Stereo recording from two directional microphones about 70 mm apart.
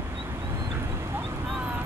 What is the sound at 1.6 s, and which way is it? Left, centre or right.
Vehicle, right.